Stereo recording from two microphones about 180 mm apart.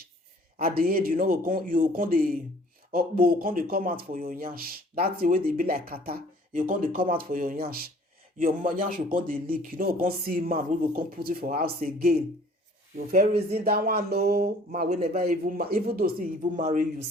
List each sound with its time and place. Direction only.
0.6 s speech: 55° right (ahead or behind)
13.5 s speech: 60° right (ahead or behind)
14.7 s speech: 40° right (ahead or behind)
15.2 s speech: 55° right (ahead or behind)
16.6 s speech: 40° right (ahead or behind)